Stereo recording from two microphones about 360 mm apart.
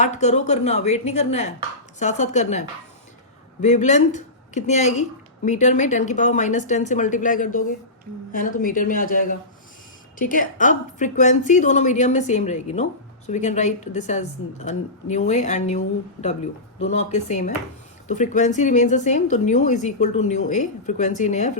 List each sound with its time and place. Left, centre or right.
0.0 s a woman's voice: centre
16.9 s a woman's voice: centre